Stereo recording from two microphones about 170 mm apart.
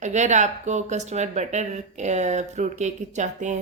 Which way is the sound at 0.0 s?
45° right (ahead or behind).